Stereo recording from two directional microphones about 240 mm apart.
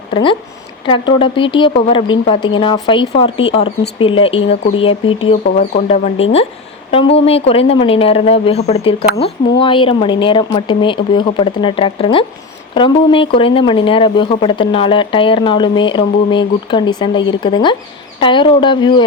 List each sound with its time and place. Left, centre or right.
0.1 s speech: left